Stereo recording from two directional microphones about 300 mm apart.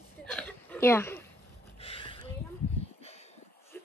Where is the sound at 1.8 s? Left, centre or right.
Centre.